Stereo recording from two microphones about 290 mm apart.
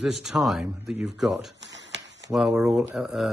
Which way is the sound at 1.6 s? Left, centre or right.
Right.